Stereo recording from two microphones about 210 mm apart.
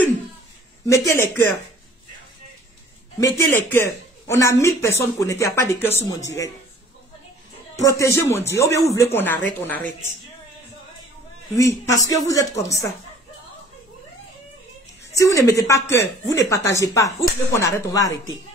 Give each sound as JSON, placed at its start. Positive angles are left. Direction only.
{"t": 0.8, "sound": "speech", "side_deg": 15}
{"t": 3.2, "sound": "speech", "side_deg": 15}
{"t": 7.8, "sound": "speech", "side_deg": 15}
{"t": 11.5, "sound": "speech", "side_deg": 15}
{"t": 15.1, "sound": "speech", "side_deg": 15}